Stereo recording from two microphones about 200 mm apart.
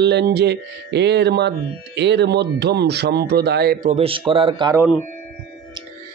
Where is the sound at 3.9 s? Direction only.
25° right (ahead or behind).